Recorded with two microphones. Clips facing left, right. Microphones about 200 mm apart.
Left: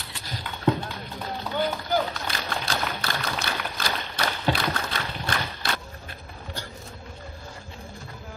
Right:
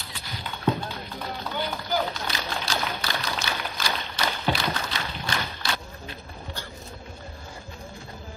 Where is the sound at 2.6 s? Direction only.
55° left (ahead or behind).